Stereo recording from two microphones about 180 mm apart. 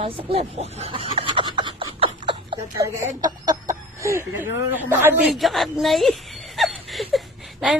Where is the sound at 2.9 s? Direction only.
20° right (ahead or behind).